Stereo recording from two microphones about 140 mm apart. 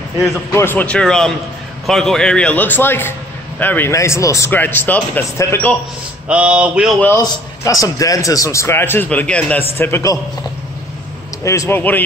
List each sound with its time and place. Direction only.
0.5 s a man's voice: 15° left (ahead or behind)
6.2 s mantra: 10° right (ahead or behind)
7.0 s a man's voice: 20° left (ahead or behind)
11.4 s a man's voice: 20° left (ahead or behind)